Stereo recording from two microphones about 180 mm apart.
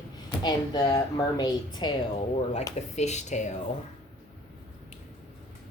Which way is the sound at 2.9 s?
40° left (ahead or behind).